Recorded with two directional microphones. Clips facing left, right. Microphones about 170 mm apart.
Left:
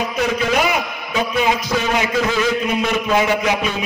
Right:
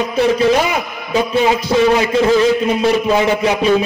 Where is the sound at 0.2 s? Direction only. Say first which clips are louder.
Right 7 dB; 30° right (ahead or behind).